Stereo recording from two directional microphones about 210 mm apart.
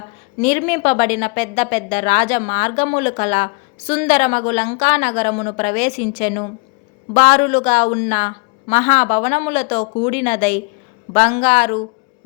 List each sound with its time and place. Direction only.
0.4 s a woman's voice: 30° left (ahead or behind)